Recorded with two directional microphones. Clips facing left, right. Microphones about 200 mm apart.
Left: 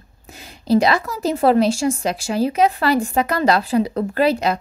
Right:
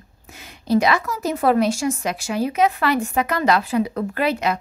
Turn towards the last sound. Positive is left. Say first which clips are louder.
# left 4 dB
turn(degrees=35)  # may be behind; listen again after turning